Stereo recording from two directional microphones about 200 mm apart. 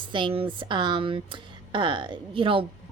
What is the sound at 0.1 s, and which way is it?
A woman's voice, 25° right (ahead or behind).